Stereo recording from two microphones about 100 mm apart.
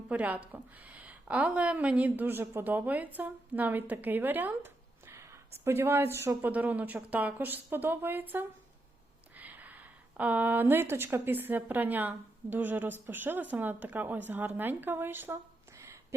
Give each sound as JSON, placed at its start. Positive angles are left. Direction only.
{"t": 0.1, "sound": "a woman's voice", "side_deg": -15}